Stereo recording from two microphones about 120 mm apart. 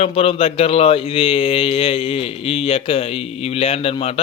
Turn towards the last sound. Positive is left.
turn(degrees=55)  # may be behind; listen again after turning